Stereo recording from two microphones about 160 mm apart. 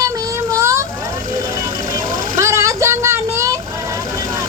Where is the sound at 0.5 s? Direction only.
20° right (ahead or behind).